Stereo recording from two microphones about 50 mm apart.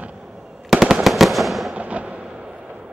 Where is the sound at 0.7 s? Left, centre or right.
Centre.